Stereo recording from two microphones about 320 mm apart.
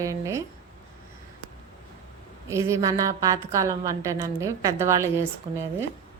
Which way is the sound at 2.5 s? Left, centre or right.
Centre.